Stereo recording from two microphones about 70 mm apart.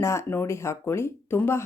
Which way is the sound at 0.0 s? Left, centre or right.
Left.